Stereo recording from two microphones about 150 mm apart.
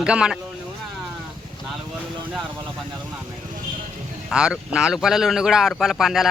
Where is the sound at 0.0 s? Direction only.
5° right (ahead or behind).